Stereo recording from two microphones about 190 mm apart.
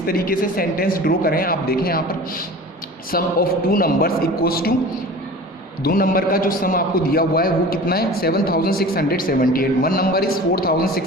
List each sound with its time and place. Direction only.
0.0 s a man's voice: 50° left (ahead or behind)
3.1 s a man's voice: 50° left (ahead or behind)
5.8 s a man's voice: 50° left (ahead or behind)